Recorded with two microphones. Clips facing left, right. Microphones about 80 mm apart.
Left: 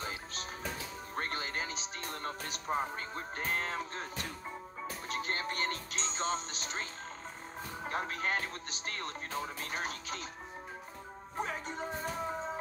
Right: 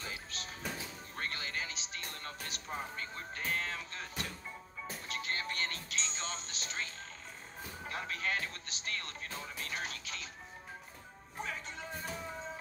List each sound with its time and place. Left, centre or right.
0.0 s music: left
5.0 s speech: left
11.3 s speech: left